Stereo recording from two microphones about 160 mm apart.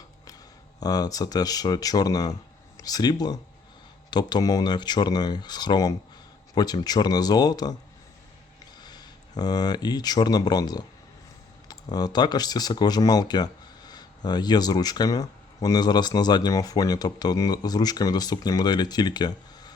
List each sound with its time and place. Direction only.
0.8 s speech: 25° left (ahead or behind)
8.8 s speech: 25° left (ahead or behind)